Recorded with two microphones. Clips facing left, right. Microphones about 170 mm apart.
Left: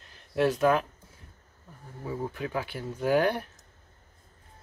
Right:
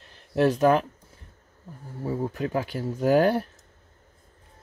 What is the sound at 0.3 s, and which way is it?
Speech, 40° right (ahead or behind).